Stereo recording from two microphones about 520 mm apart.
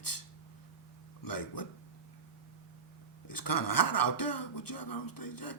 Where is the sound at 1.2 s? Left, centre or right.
Left.